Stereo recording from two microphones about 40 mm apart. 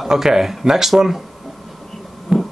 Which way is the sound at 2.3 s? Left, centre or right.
Centre.